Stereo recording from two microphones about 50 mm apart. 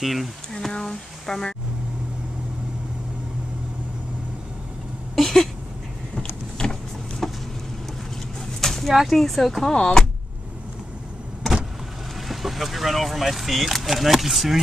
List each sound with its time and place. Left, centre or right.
0.0 s speech: centre
0.5 s speech: centre
5.1 s a sound: centre
6.1 s vehicle: centre
8.5 s a sound: centre
9.1 s speech: centre
9.8 s speech: centre
12.3 s speech: centre